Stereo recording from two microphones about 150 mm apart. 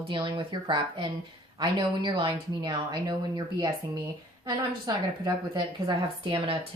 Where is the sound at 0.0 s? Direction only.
35° right (ahead or behind).